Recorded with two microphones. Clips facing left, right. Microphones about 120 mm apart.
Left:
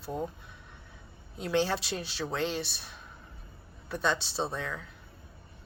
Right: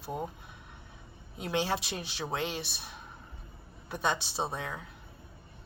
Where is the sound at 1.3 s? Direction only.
15° right (ahead or behind).